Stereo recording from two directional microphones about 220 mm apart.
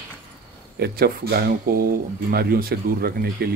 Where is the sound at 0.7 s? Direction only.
45° right (ahead or behind).